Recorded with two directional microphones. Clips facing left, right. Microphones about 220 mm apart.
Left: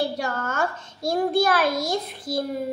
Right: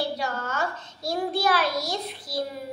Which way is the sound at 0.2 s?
50° left (ahead or behind).